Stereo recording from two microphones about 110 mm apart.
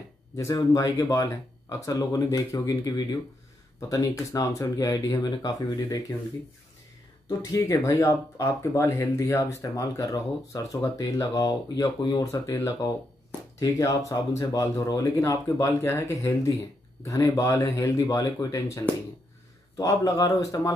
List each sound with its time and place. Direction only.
0.4 s speech: 35° left (ahead or behind)
7.2 s speech: 30° left (ahead or behind)
12.3 s speech: 25° left (ahead or behind)